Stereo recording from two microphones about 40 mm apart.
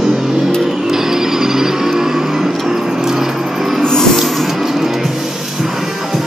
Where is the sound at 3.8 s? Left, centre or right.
Centre.